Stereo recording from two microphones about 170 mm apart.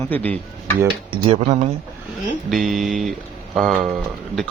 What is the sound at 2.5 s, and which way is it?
Speech, centre (ahead or behind).